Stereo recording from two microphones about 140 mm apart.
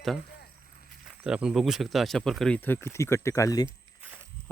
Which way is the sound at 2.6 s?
15° left (ahead or behind).